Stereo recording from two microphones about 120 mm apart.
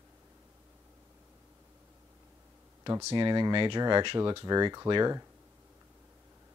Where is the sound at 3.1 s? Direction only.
40° right (ahead or behind).